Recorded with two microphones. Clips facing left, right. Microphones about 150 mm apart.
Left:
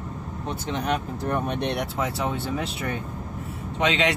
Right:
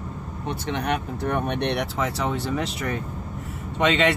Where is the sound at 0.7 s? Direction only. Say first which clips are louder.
Even; 60° right (ahead or behind).